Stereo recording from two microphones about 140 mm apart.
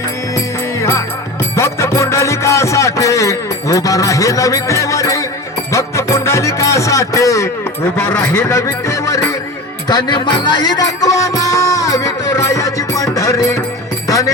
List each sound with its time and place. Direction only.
0.3 s music: 20° left (ahead or behind)